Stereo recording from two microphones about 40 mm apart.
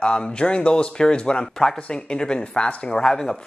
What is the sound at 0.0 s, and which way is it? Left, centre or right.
Speech, left.